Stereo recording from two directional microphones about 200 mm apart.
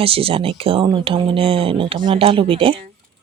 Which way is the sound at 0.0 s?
30° right (ahead or behind).